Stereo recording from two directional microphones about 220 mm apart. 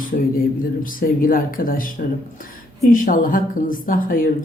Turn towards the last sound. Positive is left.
turn(degrees=40)  # may be behind; listen again after turning